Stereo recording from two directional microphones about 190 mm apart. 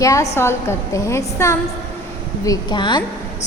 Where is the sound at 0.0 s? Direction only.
15° left (ahead or behind).